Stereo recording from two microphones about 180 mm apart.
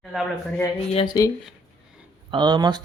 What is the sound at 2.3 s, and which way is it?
Speech, 25° right (ahead or behind).